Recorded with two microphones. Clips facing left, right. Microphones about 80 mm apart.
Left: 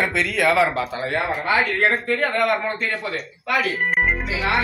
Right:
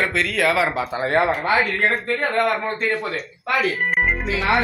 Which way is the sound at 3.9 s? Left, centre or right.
Centre.